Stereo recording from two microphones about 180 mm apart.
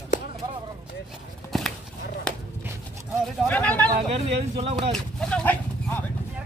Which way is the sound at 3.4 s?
10° left (ahead or behind).